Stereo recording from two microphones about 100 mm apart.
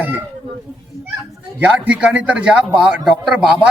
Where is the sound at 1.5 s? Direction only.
15° right (ahead or behind).